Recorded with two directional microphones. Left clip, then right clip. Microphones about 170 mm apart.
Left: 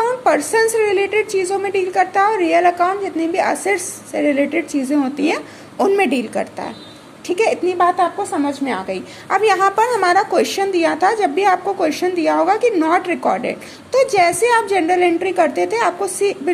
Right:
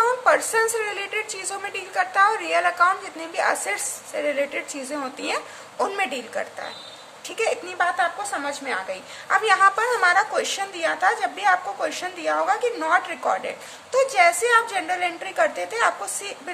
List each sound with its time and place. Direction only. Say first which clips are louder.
0.0 s a woman's voice: left 3 dB; 15° left (ahead or behind)